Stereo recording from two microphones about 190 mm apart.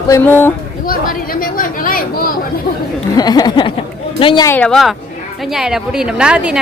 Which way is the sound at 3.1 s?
20° left (ahead or behind).